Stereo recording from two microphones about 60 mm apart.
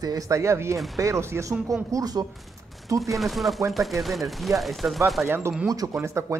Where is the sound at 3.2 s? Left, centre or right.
Centre.